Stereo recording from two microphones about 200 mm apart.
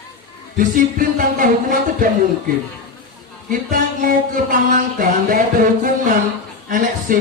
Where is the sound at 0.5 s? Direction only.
45° right (ahead or behind).